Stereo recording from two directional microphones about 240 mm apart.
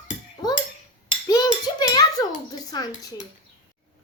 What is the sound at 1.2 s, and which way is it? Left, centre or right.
A child's voice, centre.